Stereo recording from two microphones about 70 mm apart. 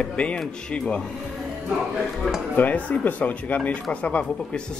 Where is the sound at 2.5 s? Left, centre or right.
Left.